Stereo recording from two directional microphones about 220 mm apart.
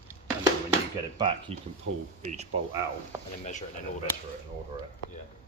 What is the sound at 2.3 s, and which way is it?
Speech, 30° right (ahead or behind).